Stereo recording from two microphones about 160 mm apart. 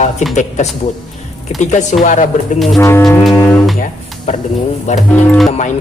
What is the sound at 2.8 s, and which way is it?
Music, 15° left (ahead or behind).